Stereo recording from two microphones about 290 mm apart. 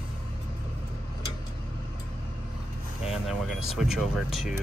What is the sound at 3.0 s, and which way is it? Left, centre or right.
Speech, centre.